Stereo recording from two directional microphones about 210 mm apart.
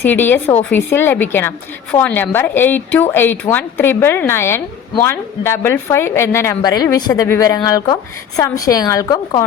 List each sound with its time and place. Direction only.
0.1 s a woman's voice: 10° left (ahead or behind)